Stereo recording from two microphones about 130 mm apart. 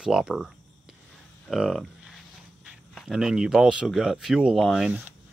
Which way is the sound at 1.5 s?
Centre (ahead or behind).